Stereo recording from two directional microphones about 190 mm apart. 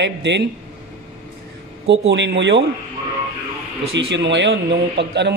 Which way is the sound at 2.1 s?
65° right (ahead or behind).